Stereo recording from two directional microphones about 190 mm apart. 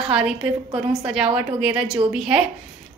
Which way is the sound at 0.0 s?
5° right (ahead or behind).